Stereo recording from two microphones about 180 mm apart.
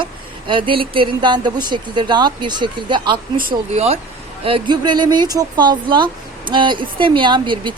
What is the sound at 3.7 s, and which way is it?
Speech, 35° right (ahead or behind).